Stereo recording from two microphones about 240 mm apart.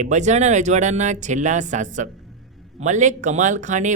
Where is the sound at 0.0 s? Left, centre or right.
Right.